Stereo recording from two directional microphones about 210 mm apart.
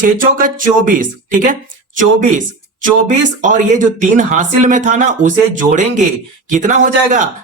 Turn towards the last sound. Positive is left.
turn(degrees=-35)  # may be behind; listen again after turning